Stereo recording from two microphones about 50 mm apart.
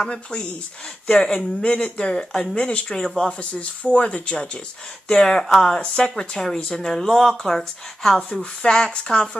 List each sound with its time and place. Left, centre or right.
0.0 s speech: centre